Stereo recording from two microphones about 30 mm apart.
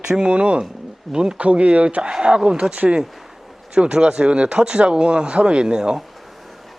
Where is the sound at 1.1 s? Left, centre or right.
Right.